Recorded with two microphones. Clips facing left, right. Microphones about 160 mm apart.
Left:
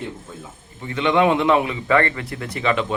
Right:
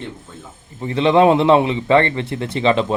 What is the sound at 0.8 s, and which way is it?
Speech, 30° right (ahead or behind).